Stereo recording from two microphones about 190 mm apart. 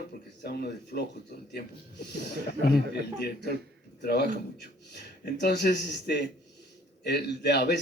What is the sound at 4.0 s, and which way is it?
Speech, 60° left (ahead or behind).